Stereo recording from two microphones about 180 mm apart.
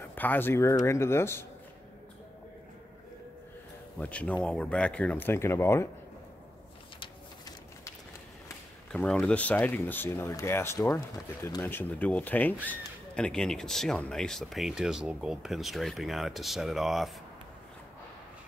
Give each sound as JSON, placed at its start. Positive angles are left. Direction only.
{"t": 0.1, "sound": "speech", "side_deg": 10}
{"t": 4.0, "sound": "speech", "side_deg": 10}
{"t": 7.0, "sound": "a sound", "side_deg": 20}
{"t": 8.5, "sound": "speech", "side_deg": 10}